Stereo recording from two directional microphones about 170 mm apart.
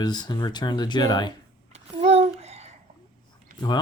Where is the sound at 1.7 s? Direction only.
40° right (ahead or behind).